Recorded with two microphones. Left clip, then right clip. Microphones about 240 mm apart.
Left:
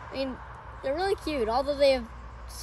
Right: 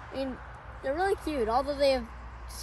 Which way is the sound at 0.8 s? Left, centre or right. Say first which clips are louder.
Left 1 dB; centre.